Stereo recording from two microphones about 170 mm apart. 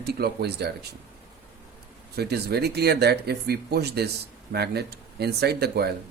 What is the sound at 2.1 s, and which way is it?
Speech, 70° right (ahead or behind).